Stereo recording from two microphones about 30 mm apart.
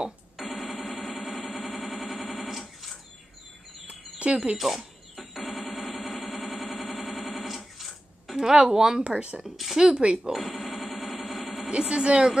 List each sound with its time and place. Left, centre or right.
0.4 s music: centre
3.8 s a sound: right
4.6 s music: centre
7.4 s a sound: centre
8.6 s speech: centre
9.0 s speech: right
9.4 s speech: centre
9.9 s a woman's voice: right
10.6 s a sound: centre
11.7 s a woman's voice: right